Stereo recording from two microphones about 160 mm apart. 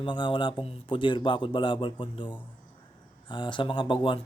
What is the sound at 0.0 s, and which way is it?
Speech, 30° left (ahead or behind).